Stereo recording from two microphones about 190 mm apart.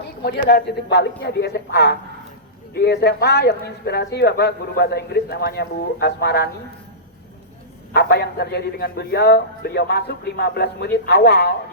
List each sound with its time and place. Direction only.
0.2 s speech: 55° left (ahead or behind)
7.9 s speech: 60° left (ahead or behind)